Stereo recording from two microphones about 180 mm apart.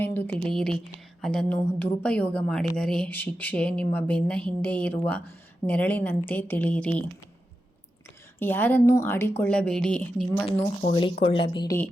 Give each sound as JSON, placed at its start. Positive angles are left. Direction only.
{"t": 0.0, "sound": "a woman's voice", "side_deg": 10}
{"t": 8.4, "sound": "a woman's voice", "side_deg": 10}
{"t": 10.9, "sound": "speech", "side_deg": 30}